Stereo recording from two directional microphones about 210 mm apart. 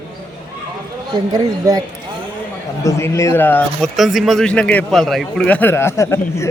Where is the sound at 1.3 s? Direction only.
20° right (ahead or behind).